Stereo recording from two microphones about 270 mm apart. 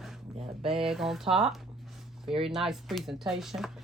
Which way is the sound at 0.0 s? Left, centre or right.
Centre.